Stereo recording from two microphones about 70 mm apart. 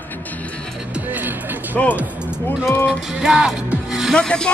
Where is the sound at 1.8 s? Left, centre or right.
Centre.